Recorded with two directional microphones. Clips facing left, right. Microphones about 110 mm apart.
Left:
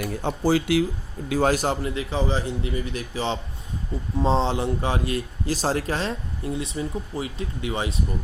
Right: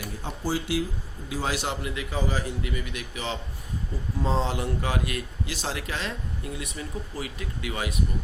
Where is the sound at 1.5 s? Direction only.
45° left (ahead or behind).